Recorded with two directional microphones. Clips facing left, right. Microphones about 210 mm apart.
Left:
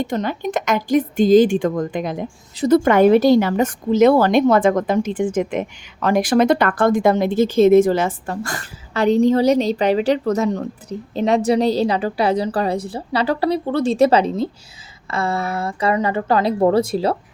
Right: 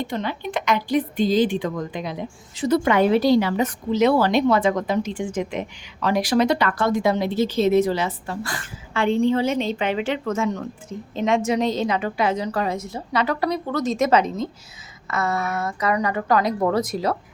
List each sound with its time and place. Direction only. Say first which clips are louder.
0.0 s a woman's voice: left 5 dB; 45° left (ahead or behind); by 17.2 s 30° left (ahead or behind)